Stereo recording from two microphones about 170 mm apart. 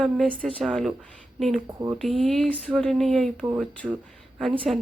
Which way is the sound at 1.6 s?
20° right (ahead or behind).